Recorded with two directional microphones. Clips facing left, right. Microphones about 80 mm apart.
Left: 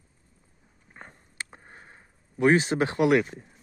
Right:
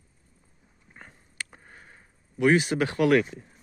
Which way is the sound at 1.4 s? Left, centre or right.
Left.